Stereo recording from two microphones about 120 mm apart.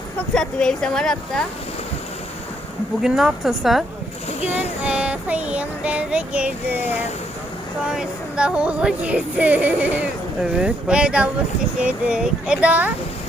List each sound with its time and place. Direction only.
0.3 s a woman's voice: 5° left (ahead or behind)
3.0 s a woman's voice: 5° right (ahead or behind)
4.3 s speech: 65° left (ahead or behind)
4.8 s child singing: 10° right (ahead or behind)